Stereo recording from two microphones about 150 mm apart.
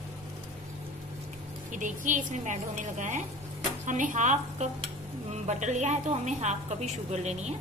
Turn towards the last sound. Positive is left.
turn(degrees=-50)  # may be behind; listen again after turning